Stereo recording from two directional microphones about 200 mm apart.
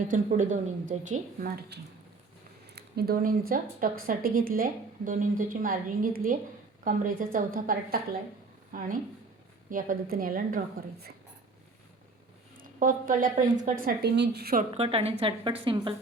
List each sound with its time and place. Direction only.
0.1 s a woman's voice: 35° right (ahead or behind)
1.7 s speech: 55° right (ahead or behind)
9.6 s speech: 45° right (ahead or behind)
12.5 s a woman's voice: 45° right (ahead or behind)
14.0 s speech: 55° right (ahead or behind)
14.7 s a woman's voice: 30° right (ahead or behind)